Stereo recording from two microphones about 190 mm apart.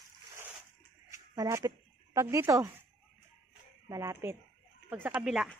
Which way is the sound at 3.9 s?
15° right (ahead or behind).